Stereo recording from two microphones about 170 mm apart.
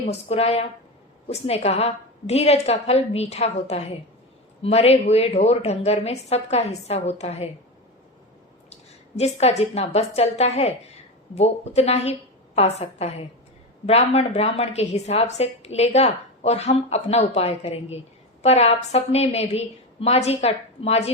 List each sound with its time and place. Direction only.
0.0 s a woman's voice: 35° left (ahead or behind)
8.7 s a woman's voice: 40° left (ahead or behind)